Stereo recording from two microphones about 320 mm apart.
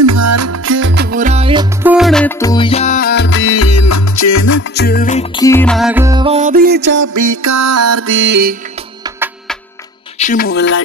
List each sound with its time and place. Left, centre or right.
0.0 s music: right; by 4.6 s left
4.6 s music: left; by 7.1 s right
7.2 s music: right
9.2 s music: centre
10.1 s speech: left